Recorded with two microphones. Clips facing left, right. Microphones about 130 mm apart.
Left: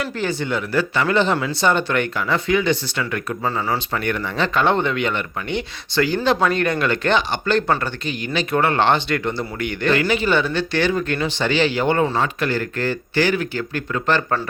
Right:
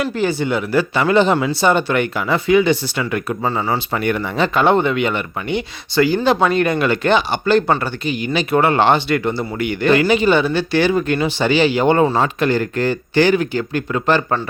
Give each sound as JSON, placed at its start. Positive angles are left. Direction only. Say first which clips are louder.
{"t": 0.0, "sound": "speech", "louder": "right 5 dB", "side_deg": -10}
{"t": 3.9, "sound": "speech", "louder": "right 4 dB", "side_deg": -15}